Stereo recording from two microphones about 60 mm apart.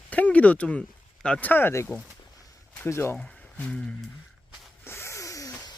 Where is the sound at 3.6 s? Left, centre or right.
Centre.